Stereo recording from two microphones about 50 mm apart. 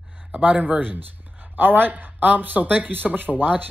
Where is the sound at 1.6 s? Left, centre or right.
Right.